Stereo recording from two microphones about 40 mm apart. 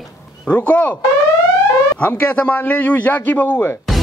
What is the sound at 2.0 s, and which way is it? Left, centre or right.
A man's voice, left.